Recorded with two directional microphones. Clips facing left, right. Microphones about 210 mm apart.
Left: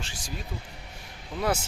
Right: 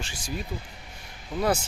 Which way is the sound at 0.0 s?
Centre (ahead or behind).